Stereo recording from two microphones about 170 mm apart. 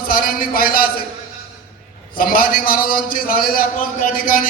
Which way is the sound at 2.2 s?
60° left (ahead or behind).